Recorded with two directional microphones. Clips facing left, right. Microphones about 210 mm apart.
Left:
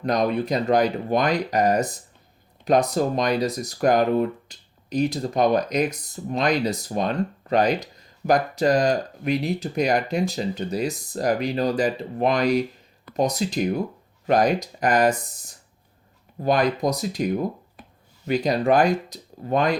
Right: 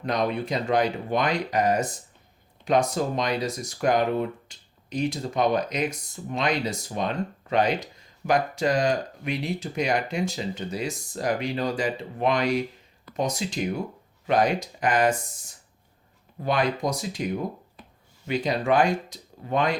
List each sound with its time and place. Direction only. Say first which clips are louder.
0.0 s speech: left 4 dB; 40° left (ahead or behind)
16.4 s speech: left 4 dB; 40° left (ahead or behind)